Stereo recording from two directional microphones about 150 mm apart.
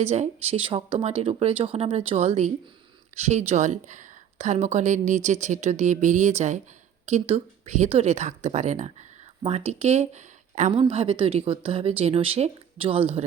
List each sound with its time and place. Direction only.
0.0 s speech: 45° right (ahead or behind)